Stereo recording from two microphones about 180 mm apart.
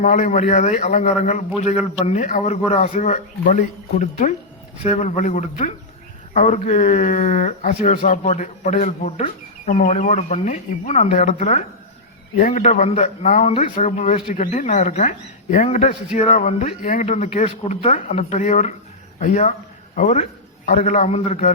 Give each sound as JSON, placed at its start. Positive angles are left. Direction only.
{"t": 0.0, "sound": "a man's voice", "side_deg": 45}